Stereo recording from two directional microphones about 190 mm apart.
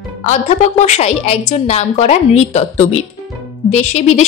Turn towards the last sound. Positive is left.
turn(degrees=35)  # may be behind; listen again after turning